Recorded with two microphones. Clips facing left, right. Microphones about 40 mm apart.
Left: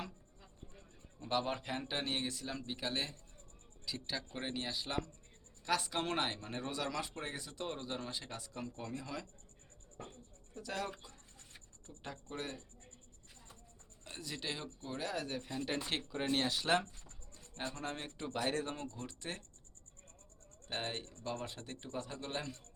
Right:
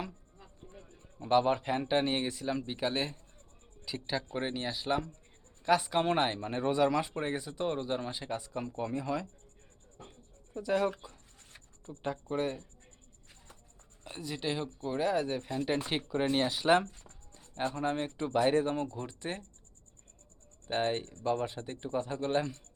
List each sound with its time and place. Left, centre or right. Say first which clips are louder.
0.3 s speech: right 5 dB; centre
10.5 s speech: right 11 dB; centre
11.0 s a sound: right 6 dB; centre
12.0 s speech: right 11 dB; centre
14.0 s speech: right 7 dB; centre
20.7 s speech: right 10 dB; centre